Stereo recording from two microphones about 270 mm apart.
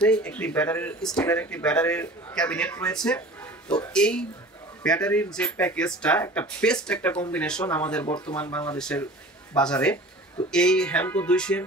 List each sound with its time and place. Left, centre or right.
0.0 s speech: centre
3.6 s speech: centre
3.9 s speech: centre